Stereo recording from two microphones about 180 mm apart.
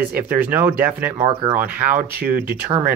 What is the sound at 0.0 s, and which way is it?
Speech, 10° right (ahead or behind).